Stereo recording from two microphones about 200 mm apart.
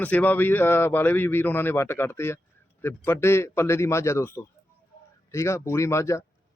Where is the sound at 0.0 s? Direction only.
10° left (ahead or behind).